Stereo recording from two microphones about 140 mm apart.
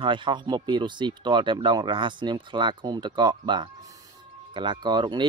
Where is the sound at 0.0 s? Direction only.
35° right (ahead or behind).